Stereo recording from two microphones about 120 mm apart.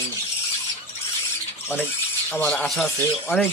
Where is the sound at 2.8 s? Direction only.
15° left (ahead or behind).